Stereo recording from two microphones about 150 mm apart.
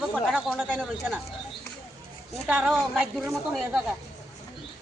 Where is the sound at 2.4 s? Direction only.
5° right (ahead or behind).